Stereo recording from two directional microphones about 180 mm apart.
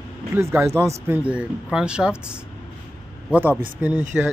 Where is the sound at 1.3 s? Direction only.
5° right (ahead or behind).